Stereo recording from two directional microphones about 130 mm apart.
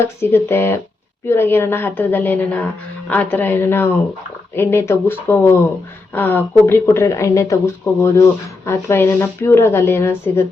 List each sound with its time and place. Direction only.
0.0 s a woman's voice: 20° left (ahead or behind)